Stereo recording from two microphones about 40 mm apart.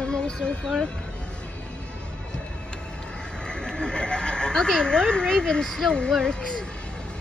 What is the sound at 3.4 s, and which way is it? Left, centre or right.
Speech, left.